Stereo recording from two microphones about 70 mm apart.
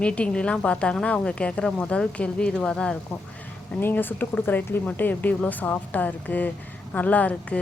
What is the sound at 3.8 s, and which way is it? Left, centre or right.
A woman's voice, left.